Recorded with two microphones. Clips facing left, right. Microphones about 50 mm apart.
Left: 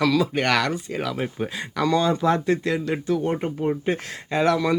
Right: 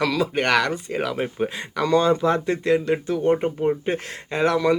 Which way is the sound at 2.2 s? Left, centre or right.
Centre.